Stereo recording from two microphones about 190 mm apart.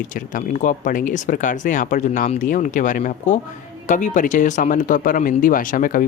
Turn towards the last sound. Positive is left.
turn(degrees=45)  # may be behind; listen again after turning